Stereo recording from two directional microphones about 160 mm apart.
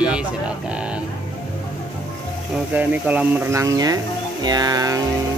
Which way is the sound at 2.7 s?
10° right (ahead or behind).